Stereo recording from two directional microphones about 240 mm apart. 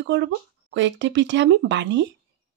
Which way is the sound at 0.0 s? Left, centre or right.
Right.